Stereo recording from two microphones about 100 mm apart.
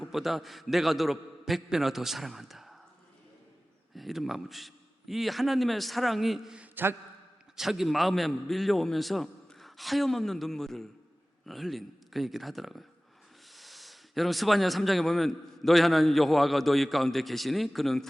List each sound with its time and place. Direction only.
0.0 s a man's voice: centre (ahead or behind)
3.9 s a man's voice: centre (ahead or behind)